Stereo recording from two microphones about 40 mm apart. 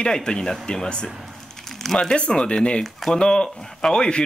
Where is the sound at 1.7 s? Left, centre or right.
Centre.